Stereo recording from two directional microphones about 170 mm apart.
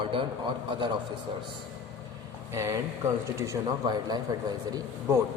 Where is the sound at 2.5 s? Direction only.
15° right (ahead or behind).